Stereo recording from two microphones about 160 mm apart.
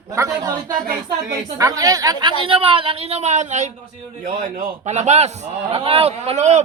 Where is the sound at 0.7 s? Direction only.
65° right (ahead or behind).